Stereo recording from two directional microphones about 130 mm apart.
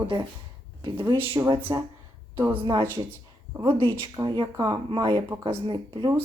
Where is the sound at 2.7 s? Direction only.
20° right (ahead or behind).